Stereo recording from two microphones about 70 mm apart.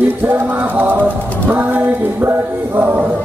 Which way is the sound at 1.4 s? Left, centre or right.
Right.